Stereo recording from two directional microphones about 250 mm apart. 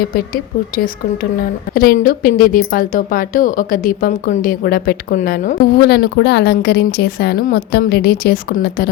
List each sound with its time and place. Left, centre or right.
0.0 s a woman's voice: left
1.7 s a woman's voice: left